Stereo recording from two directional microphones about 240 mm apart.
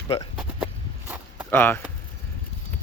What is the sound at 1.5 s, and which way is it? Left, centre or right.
Speech, centre.